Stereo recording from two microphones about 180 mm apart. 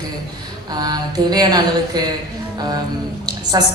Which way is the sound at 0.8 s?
20° right (ahead or behind).